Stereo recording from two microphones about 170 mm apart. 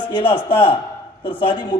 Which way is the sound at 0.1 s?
30° left (ahead or behind).